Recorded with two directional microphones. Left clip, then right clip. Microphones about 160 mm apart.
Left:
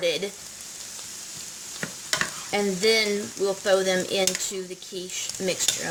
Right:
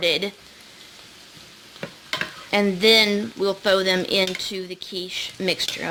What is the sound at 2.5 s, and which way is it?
Speech, 50° right (ahead or behind).